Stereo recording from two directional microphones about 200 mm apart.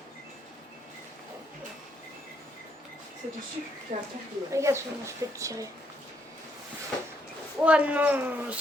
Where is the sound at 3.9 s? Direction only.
50° right (ahead or behind).